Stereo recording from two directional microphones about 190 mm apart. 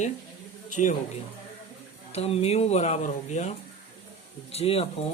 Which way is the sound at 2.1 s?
35° left (ahead or behind).